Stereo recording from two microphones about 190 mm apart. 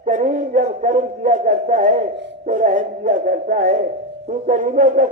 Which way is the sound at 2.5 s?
40° right (ahead or behind).